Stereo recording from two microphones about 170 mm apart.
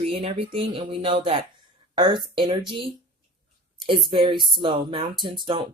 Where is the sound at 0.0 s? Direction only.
35° right (ahead or behind).